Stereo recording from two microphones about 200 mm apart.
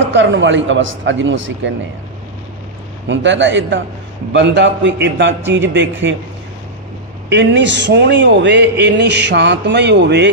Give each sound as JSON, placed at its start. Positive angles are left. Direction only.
{"t": 0.1, "sound": "a man's voice", "side_deg": -65}
{"t": 3.1, "sound": "a man's voice", "side_deg": -65}
{"t": 7.2, "sound": "speech", "side_deg": -60}